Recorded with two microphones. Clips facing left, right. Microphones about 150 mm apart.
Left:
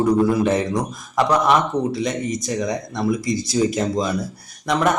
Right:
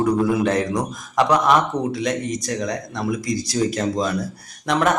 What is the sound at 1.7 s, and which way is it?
Speech, 15° right (ahead or behind).